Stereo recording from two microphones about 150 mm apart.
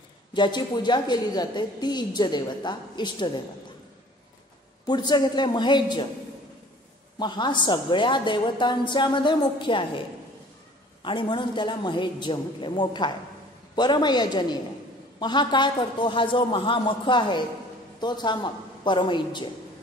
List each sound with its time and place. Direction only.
0.3 s a woman's voice: 30° left (ahead or behind)
4.8 s a woman's voice: 30° left (ahead or behind)
7.2 s a woman's voice: 30° left (ahead or behind)